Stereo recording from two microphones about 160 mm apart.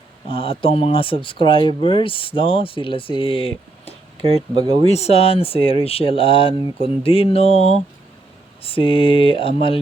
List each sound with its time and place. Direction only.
0.3 s speech: 35° left (ahead or behind)
4.3 s speech: 35° right (ahead or behind)
4.9 s speech: 40° left (ahead or behind)